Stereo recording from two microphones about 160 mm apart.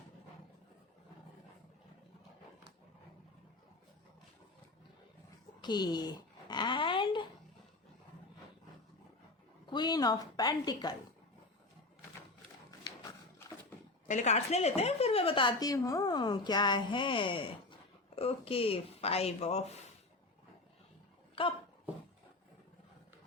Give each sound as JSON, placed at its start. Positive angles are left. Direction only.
{"t": 5.6, "sound": "dog", "side_deg": 25}
{"t": 9.6, "sound": "a woman's voice", "side_deg": 25}
{"t": 14.1, "sound": "a woman's voice", "side_deg": 45}
{"t": 21.4, "sound": "a woman's voice", "side_deg": 35}